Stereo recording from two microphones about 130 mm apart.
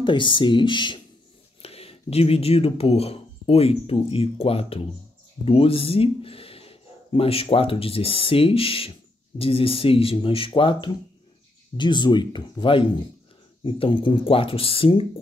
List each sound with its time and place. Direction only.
0.0 s speech: 40° left (ahead or behind)
1.6 s speech: 50° left (ahead or behind)